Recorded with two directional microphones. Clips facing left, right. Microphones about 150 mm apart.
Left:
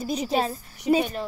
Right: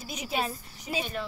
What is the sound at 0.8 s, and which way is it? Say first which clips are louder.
Speech: left 12 dB; 60° left (ahead or behind).